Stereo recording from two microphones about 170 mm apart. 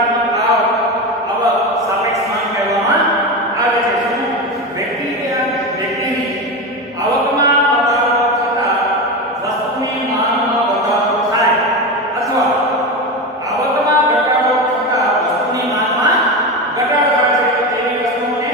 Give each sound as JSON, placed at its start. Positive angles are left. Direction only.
{"t": 8.1, "sound": "chant", "side_deg": 0}
{"t": 13.7, "sound": "a sound", "side_deg": -20}
{"t": 14.5, "sound": "choir", "side_deg": 0}